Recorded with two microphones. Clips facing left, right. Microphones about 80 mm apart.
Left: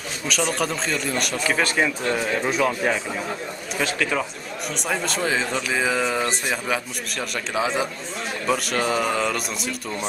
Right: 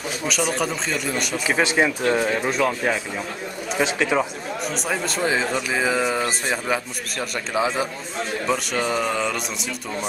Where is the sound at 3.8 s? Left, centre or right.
Centre.